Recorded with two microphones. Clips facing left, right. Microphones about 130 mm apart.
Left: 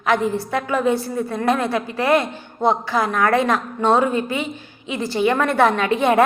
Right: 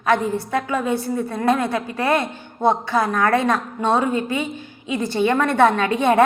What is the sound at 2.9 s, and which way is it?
A woman's voice, 25° right (ahead or behind).